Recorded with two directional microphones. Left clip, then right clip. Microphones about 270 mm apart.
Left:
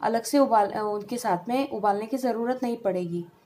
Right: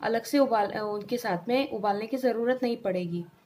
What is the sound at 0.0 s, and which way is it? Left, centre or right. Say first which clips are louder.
A woman's voice: left 2 dB; centre.